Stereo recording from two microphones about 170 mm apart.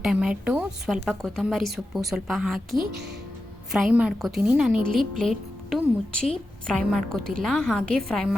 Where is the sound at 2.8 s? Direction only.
75° right (ahead or behind).